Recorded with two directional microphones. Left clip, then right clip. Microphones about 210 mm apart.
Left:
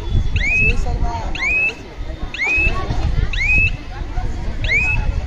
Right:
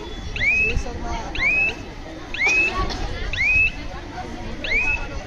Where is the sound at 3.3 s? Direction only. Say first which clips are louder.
Left 2 dB; 55° left (ahead or behind).